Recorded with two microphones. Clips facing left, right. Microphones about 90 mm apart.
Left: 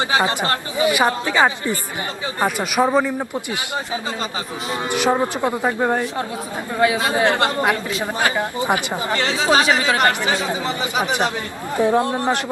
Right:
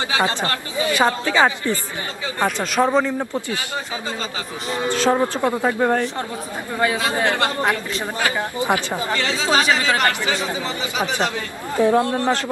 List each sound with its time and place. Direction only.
0.0 s a woman's voice: 20° left (ahead or behind); by 3.2 s 5° left (ahead or behind)
4.9 s a woman's voice: 15° left (ahead or behind)
7.1 s speech: 20° left (ahead or behind)
7.6 s a woman's voice: 10° left (ahead or behind)
8.2 s speech: 20° left (ahead or behind)